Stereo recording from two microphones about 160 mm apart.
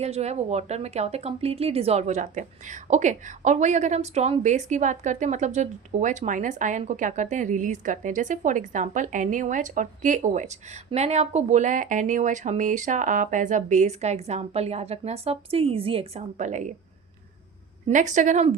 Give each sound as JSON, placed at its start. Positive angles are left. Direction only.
{"t": 0.0, "sound": "speech", "side_deg": -45}
{"t": 16.4, "sound": "speech", "side_deg": -50}
{"t": 17.8, "sound": "speech", "side_deg": -50}